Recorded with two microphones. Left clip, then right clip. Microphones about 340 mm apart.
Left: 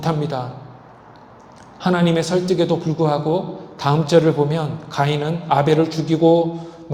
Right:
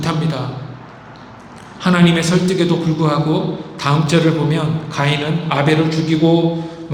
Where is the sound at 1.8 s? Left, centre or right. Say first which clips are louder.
Right 3 dB; left.